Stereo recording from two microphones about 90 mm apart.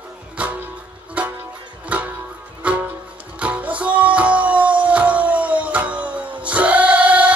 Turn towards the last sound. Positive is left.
turn(degrees=-15)  # may be behind; listen again after turning